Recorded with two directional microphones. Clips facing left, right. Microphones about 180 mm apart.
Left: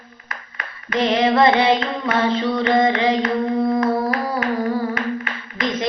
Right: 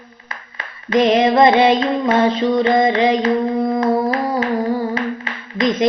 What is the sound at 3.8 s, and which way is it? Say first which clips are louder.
Humming: right 3 dB; 30° right (ahead or behind).